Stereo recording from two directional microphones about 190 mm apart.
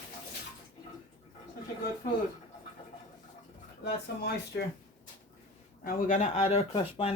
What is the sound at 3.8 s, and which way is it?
Speech, 60° left (ahead or behind).